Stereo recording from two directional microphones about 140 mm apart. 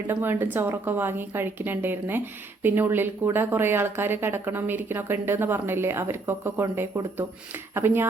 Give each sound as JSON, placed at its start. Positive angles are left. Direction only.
{"t": 0.1, "sound": "speech", "side_deg": -15}